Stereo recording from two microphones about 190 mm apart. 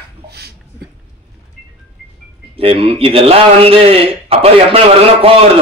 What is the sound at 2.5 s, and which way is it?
A man's voice, 30° right (ahead or behind).